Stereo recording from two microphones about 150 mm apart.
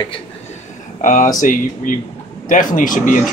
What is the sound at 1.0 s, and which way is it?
Speech, 60° left (ahead or behind).